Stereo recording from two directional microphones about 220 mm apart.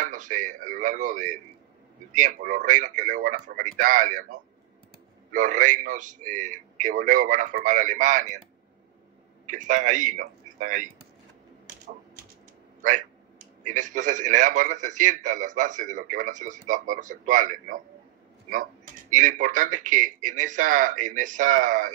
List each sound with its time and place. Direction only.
0.0 s a man's voice: 35° right (ahead or behind)
9.5 s a man's voice: 35° right (ahead or behind)
13.7 s a man's voice: 35° right (ahead or behind)